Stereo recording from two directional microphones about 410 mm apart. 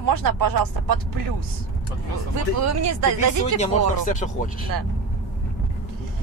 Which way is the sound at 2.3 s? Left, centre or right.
Right.